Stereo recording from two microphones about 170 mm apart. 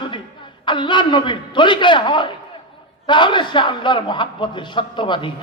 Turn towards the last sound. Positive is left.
turn(degrees=30)  # may be behind; listen again after turning